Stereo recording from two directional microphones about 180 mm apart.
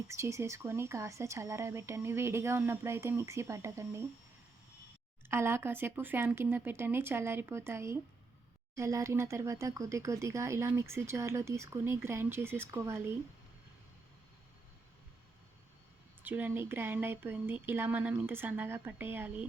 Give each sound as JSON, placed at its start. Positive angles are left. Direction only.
{"t": 0.1, "sound": "speech", "side_deg": -15}
{"t": 5.3, "sound": "speech", "side_deg": -15}
{"t": 16.2, "sound": "speech", "side_deg": -10}